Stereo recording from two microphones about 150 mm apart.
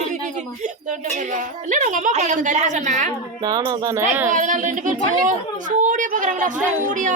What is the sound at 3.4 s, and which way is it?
Speech, 25° right (ahead or behind).